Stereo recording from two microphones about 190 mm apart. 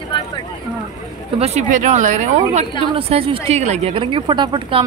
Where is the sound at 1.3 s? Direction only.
35° right (ahead or behind).